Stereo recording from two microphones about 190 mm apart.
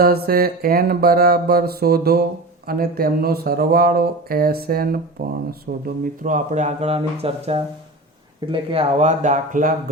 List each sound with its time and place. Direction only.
0.0 s speech: 50° right (ahead or behind)
6.2 s speech: 40° right (ahead or behind)